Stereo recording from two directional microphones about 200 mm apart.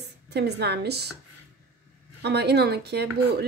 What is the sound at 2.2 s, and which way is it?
A woman's voice, 55° right (ahead or behind).